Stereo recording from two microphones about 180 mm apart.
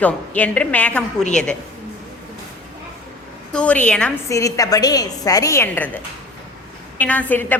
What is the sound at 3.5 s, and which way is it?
Speech, 5° left (ahead or behind).